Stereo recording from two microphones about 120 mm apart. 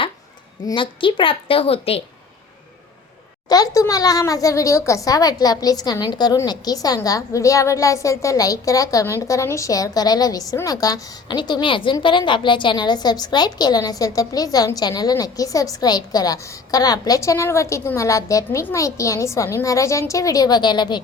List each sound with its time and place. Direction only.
0.7 s a woman's voice: 40° left (ahead or behind)
3.5 s a child's voice: 30° left (ahead or behind)